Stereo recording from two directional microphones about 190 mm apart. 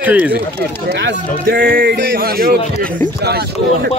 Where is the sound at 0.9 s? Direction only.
65° right (ahead or behind).